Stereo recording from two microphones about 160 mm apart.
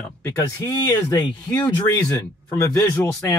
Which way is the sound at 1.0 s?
10° left (ahead or behind).